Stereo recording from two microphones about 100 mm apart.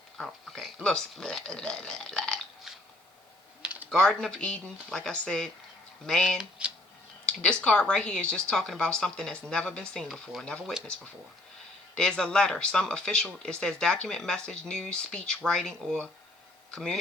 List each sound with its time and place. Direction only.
0.2 s speech: 5° left (ahead or behind)
3.6 s typing: 15° right (ahead or behind)
3.8 s speech: 5° left (ahead or behind)
6.6 s music: 10° right (ahead or behind)
7.3 s speech: 10° left (ahead or behind)
11.9 s speech: 5° left (ahead or behind)